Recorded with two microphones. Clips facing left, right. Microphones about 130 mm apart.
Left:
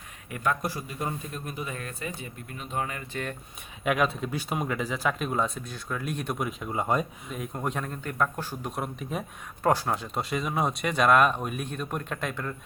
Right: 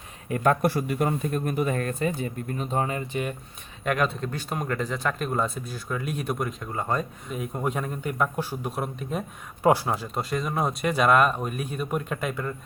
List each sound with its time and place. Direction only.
0.3 s a man's voice: 45° right (ahead or behind)
3.1 s speech: 15° right (ahead or behind)
3.8 s speech: 5° left (ahead or behind)
7.3 s speech: centre (ahead or behind)